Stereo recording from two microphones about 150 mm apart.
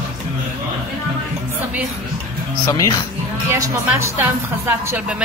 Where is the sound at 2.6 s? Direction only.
25° left (ahead or behind).